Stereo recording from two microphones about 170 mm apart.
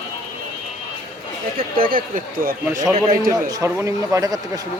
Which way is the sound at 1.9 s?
55° right (ahead or behind).